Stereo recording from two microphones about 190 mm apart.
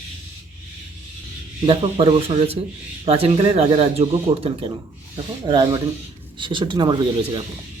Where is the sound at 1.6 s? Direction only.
30° right (ahead or behind).